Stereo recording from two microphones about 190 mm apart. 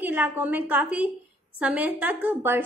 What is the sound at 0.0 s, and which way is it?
A woman's voice, 10° right (ahead or behind).